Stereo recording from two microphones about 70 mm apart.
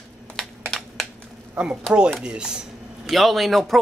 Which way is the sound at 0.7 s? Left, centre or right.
Centre.